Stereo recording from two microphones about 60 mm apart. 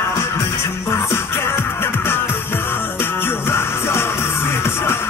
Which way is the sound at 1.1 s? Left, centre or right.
Left.